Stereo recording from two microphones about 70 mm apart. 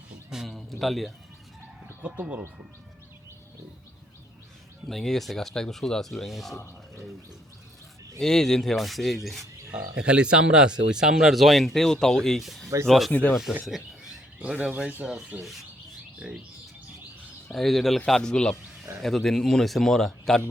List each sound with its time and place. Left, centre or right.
0.3 s a sound: centre
2.0 s speech: centre
4.9 s speech: centre
8.2 s speech: centre
9.7 s speech: centre
13.1 s speech: left
13.7 s a sound: centre
14.6 s speech: centre
15.4 s speech: centre
17.5 s speech: centre